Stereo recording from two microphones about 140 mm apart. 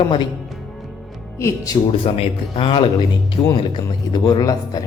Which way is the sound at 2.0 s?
40° left (ahead or behind).